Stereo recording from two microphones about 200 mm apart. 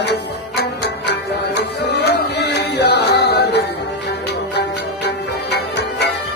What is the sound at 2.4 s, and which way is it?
Music, 55° left (ahead or behind).